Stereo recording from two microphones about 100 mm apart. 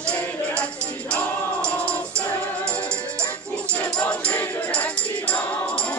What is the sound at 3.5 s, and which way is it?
Music, 10° left (ahead or behind).